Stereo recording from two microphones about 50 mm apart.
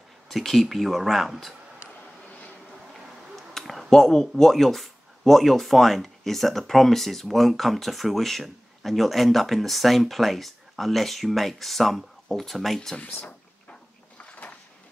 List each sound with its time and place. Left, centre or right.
0.3 s speech: centre
2.9 s a sound: centre
6.7 s speech: centre
13.7 s cupboard open or close: left